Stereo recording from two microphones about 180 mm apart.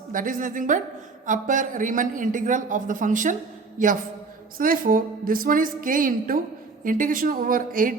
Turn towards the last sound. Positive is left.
turn(degrees=-50)  # may be behind; listen again after turning